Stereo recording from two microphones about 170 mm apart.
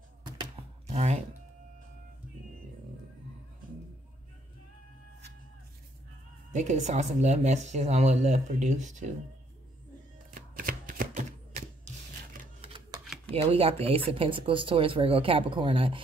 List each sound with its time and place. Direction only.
0.4 s computer keyboard: 35° right (ahead or behind)
6.5 s a woman's voice: 45° right (ahead or behind)
10.3 s chopping: 55° right (ahead or behind)
12.6 s a sound: 30° right (ahead or behind)
13.3 s speech: 35° right (ahead or behind)